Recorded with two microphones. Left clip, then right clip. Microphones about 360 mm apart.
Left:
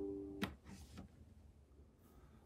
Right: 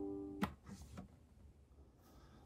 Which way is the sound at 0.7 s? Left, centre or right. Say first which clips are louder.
Right 2 dB; centre.